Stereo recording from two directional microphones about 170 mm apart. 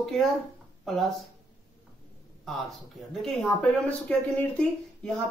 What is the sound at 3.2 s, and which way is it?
Speech, 5° left (ahead or behind).